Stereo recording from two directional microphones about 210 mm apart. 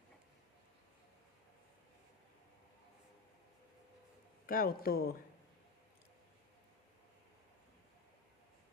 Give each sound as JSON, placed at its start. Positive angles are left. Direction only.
{"t": 4.4, "sound": "speech", "side_deg": 45}